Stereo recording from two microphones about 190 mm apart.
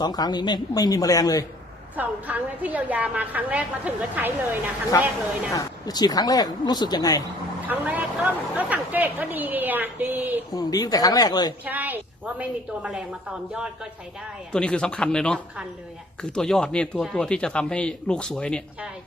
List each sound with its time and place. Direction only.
0.0 s speech: 20° left (ahead or behind)
2.0 s speech: 10° right (ahead or behind)
5.5 s speech: 20° left (ahead or behind)
7.7 s speech: 10° right (ahead or behind)
10.5 s speech: 20° left (ahead or behind)
11.6 s speech: 10° right (ahead or behind)